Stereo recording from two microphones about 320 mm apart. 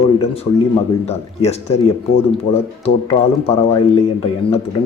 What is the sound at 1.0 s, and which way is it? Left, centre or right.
Speech, centre.